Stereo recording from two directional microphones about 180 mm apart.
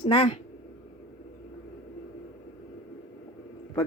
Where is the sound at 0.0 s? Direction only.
30° left (ahead or behind).